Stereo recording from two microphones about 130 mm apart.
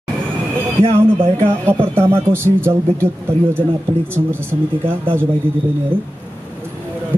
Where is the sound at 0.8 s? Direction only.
45° right (ahead or behind).